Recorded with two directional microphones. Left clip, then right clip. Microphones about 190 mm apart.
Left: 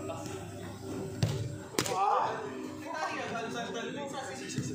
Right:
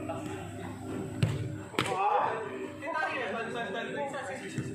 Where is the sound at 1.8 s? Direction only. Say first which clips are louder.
Right 2 dB; 50° left (ahead or behind).